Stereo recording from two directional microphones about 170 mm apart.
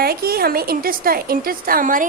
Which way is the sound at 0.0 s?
65° right (ahead or behind).